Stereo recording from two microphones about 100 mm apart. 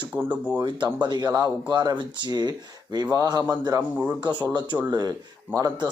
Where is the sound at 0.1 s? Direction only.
20° right (ahead or behind).